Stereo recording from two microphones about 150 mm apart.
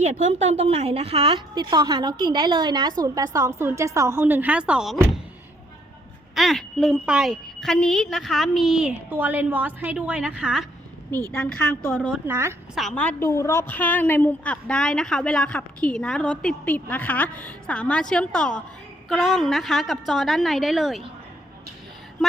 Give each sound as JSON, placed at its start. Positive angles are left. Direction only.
{"t": 0.0, "sound": "a woman's voice", "side_deg": -50}
{"t": 6.3, "sound": "a woman's voice", "side_deg": 0}
{"t": 12.3, "sound": "speech", "side_deg": -15}
{"t": 12.7, "sound": "a woman's voice", "side_deg": 5}